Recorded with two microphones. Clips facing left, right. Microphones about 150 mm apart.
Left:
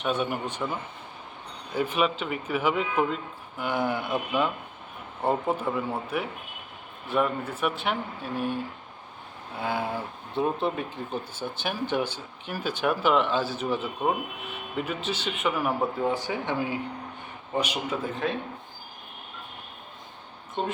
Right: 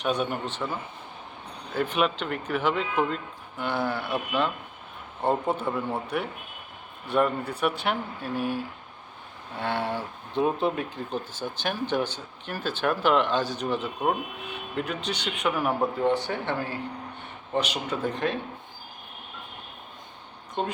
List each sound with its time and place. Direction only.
0.0 s speech: 5° left (ahead or behind)
5.2 s speech: 10° left (ahead or behind)